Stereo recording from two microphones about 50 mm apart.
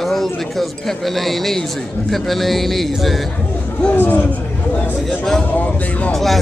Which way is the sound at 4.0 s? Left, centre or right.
Left.